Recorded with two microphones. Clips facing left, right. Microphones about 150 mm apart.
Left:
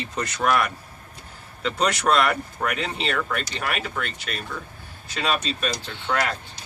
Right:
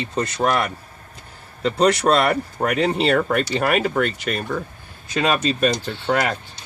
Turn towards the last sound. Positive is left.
turn(degrees=-50)  # may be behind; listen again after turning